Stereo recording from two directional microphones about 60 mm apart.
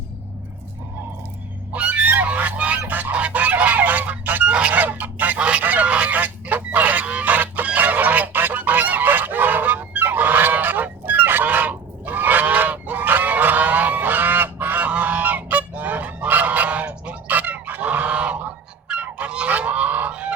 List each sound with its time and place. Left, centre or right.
1.7 s fowl: right
4.8 s goose: right